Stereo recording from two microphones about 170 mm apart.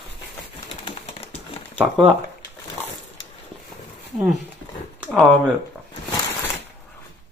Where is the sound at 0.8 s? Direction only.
35° left (ahead or behind).